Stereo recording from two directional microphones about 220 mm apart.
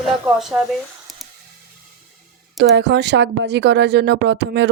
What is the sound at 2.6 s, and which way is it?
Speech, 50° right (ahead or behind).